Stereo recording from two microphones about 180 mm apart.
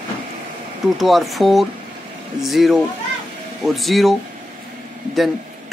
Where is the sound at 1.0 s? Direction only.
Centre (ahead or behind).